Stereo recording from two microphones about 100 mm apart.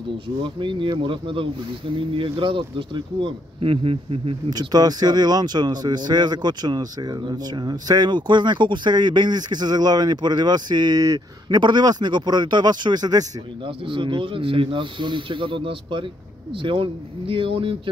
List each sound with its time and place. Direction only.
0.4 s speech: 55° right (ahead or behind)
4.5 s speech: 40° right (ahead or behind)
13.8 s speech: 55° right (ahead or behind)